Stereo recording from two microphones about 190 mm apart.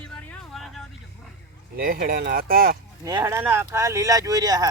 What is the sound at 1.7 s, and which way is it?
Speech, 50° right (ahead or behind).